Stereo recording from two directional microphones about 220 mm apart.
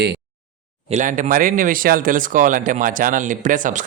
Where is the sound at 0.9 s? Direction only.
35° right (ahead or behind).